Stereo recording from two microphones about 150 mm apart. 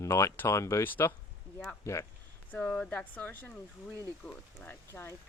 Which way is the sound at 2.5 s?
5° left (ahead or behind).